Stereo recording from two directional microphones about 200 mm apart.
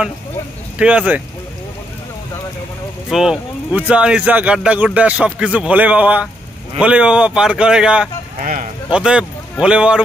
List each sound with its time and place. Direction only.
0.7 s speech: 5° right (ahead or behind)
3.1 s speech: centre (ahead or behind)
8.4 s speech: 40° right (ahead or behind)
8.9 s speech: 5° right (ahead or behind)